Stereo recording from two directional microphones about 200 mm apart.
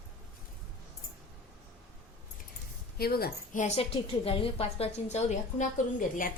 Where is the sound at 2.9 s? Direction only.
50° left (ahead or behind); by 5.6 s 35° left (ahead or behind).